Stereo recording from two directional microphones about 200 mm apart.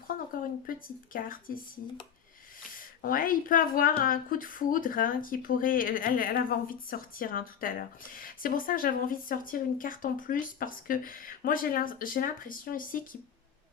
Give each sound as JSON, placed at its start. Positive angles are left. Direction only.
{"t": 0.7, "sound": "speech", "side_deg": 45}
{"t": 2.7, "sound": "speech", "side_deg": 45}